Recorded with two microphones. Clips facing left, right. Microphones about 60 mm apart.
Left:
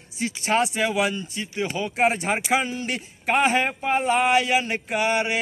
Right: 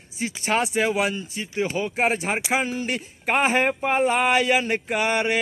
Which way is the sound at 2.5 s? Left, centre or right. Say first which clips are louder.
Right 1 dB; right.